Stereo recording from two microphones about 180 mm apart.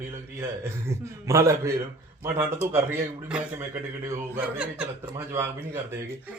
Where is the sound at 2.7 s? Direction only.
10° right (ahead or behind).